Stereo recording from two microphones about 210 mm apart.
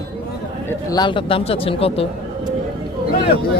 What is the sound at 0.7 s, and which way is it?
A man's voice, 20° left (ahead or behind).